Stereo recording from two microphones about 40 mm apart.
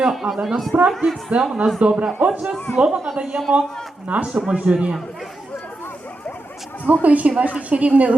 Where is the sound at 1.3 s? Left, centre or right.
Right.